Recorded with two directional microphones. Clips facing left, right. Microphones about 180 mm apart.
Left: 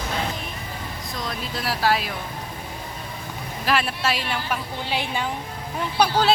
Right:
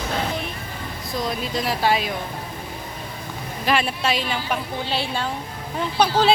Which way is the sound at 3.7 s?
Centre (ahead or behind).